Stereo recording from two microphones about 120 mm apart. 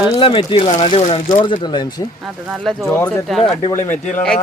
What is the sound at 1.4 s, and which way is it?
Speech, 40° left (ahead or behind).